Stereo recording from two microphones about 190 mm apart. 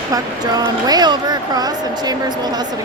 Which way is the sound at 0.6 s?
20° right (ahead or behind).